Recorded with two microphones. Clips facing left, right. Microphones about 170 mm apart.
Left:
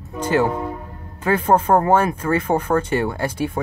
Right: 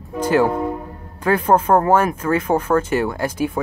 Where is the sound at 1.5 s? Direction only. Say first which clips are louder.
Even; 30° left (ahead or behind).